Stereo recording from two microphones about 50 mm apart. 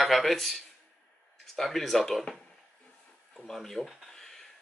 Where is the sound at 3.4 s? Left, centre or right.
Centre.